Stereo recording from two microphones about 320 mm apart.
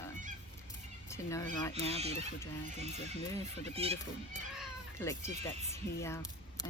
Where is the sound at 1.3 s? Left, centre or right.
Centre.